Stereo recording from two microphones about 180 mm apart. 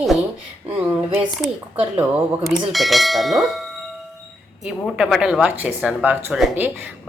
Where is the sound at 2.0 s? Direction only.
5° right (ahead or behind).